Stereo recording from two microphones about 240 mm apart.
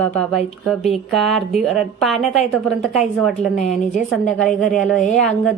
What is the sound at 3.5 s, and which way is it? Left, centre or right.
Speech, left.